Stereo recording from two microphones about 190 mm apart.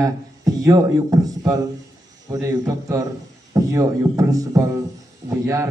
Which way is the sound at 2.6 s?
15° right (ahead or behind).